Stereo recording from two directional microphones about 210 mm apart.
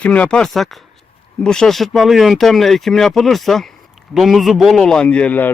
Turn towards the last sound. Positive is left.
turn(degrees=5)  # may be behind; listen again after turning